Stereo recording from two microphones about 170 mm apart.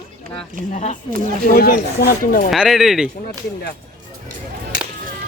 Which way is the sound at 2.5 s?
Centre (ahead or behind).